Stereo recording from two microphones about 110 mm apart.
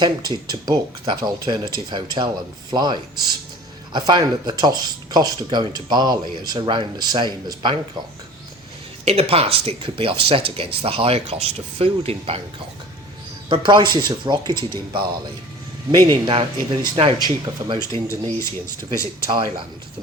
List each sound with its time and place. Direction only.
0.0 s speech: 40° right (ahead or behind)
9.0 s speech: 65° right (ahead or behind)
13.5 s speech: 45° right (ahead or behind)
16.2 s speech: 50° right (ahead or behind)
17.9 s speech: 25° left (ahead or behind)
19.3 s speech: 45° right (ahead or behind)